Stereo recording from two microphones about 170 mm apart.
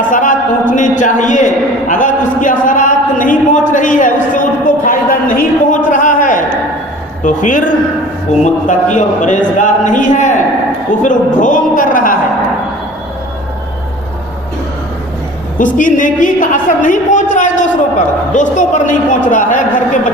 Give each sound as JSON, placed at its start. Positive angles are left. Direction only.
{"t": 0.1, "sound": "a sound", "side_deg": 50}
{"t": 7.2, "sound": "a woman's voice", "side_deg": 50}
{"t": 15.5, "sound": "a woman's voice", "side_deg": 50}